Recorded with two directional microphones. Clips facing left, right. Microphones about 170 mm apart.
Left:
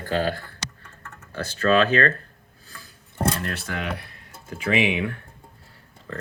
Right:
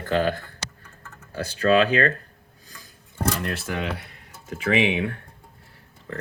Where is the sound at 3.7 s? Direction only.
25° right (ahead or behind).